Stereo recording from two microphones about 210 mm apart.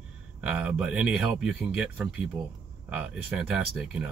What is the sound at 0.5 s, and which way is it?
Speech, 5° right (ahead or behind).